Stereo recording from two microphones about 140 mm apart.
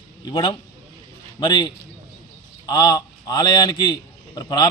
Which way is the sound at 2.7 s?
30° left (ahead or behind).